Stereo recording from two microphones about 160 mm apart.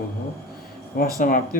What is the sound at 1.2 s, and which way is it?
Speech, 60° left (ahead or behind).